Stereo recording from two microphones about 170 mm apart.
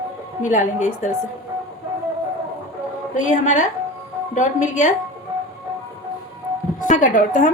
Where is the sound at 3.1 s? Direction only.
45° left (ahead or behind).